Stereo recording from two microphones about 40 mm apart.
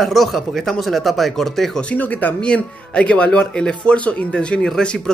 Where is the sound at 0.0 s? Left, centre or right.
Centre.